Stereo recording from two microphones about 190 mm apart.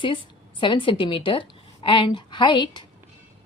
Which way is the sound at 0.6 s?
25° left (ahead or behind).